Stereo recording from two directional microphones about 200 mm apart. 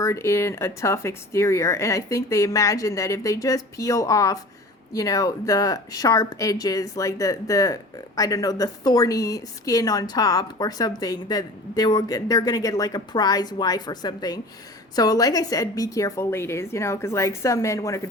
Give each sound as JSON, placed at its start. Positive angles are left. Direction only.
{"t": 0.0, "sound": "speech", "side_deg": 15}